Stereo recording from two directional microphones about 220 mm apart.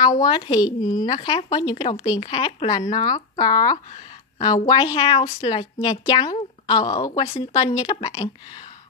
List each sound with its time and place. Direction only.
0.0 s a woman's voice: 15° left (ahead or behind)